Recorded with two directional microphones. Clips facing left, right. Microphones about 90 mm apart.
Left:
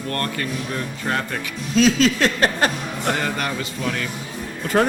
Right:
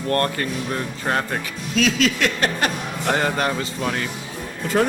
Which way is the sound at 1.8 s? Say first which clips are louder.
Left 3 dB; 35° left (ahead or behind).